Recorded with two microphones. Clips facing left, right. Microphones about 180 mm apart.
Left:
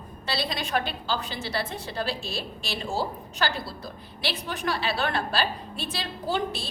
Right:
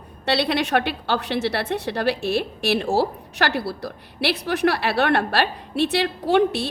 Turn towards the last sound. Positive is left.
turn(degrees=-70)  # may be behind; listen again after turning